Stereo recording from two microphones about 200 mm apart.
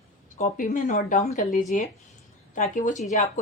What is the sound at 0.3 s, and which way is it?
Speech, 35° left (ahead or behind).